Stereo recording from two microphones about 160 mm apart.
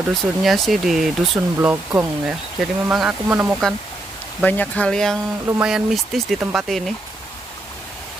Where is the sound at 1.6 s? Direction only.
15° right (ahead or behind).